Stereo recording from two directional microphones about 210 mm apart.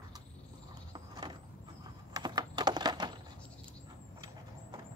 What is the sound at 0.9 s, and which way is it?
Vehicle, 20° right (ahead or behind).